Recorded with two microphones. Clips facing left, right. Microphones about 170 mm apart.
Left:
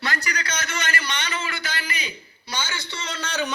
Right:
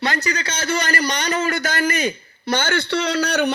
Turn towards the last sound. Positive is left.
turn(degrees=-70)  # may be behind; listen again after turning